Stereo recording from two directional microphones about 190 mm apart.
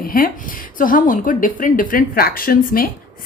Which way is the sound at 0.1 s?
50° left (ahead or behind).